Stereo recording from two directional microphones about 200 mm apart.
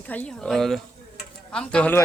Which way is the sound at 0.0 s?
10° left (ahead or behind).